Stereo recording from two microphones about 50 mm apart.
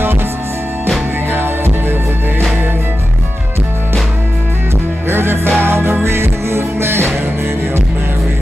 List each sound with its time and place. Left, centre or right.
1.3 s music: right
5.1 s music: right